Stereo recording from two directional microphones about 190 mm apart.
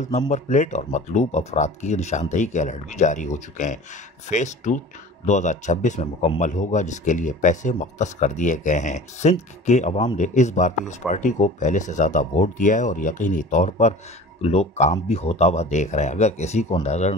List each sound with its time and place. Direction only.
0.1 s a man's voice: 40° left (ahead or behind)